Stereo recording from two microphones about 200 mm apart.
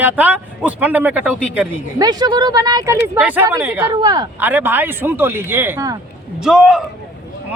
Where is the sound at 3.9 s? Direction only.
20° right (ahead or behind).